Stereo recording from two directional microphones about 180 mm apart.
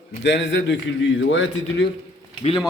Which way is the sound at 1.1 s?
90° left.